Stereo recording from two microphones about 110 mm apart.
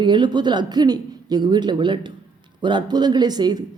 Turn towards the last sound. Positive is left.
turn(degrees=-40)  # may be behind; listen again after turning